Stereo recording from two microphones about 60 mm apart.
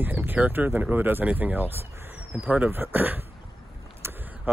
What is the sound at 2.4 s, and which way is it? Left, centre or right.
Speech, right.